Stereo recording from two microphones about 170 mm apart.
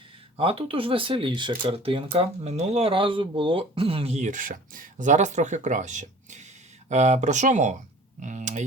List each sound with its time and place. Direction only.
0.3 s speech: 35° right (ahead or behind)